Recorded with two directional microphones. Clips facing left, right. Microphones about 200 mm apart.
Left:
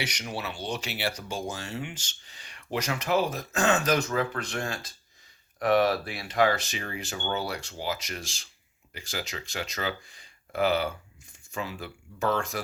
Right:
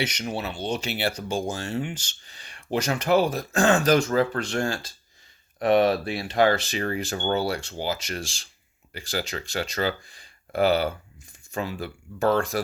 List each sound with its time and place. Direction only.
0.0 s speech: 25° right (ahead or behind)
6.8 s speech: 40° right (ahead or behind)